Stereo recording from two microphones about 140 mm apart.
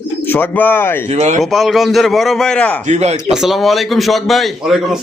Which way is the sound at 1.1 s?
50° right (ahead or behind).